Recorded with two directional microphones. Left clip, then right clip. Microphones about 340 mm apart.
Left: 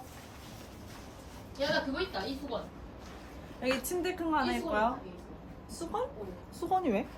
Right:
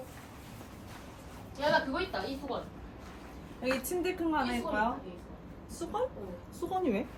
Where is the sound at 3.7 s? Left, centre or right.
Centre.